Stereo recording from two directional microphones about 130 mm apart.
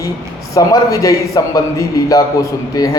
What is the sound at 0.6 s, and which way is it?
A man's voice, 25° left (ahead or behind).